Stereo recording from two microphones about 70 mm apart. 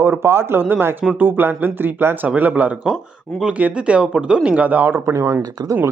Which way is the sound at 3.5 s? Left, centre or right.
Centre.